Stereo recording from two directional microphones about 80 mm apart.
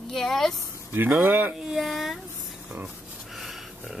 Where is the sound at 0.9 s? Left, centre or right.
Right.